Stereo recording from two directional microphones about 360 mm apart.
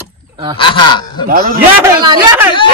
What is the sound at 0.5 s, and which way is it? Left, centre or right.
Speech, centre.